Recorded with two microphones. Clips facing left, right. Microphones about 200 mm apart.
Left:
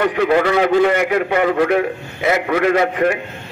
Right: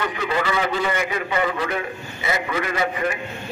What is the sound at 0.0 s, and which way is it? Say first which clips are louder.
A man's voice: left 9 dB; 60° left (ahead or behind).